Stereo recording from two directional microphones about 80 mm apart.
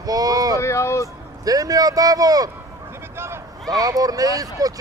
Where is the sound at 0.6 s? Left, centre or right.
Left.